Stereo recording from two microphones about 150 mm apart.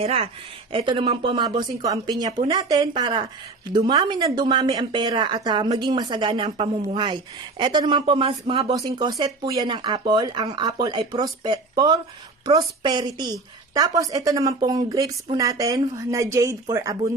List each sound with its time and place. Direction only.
0.0 s speech: 40° right (ahead or behind)
8.7 s speech: 25° right (ahead or behind)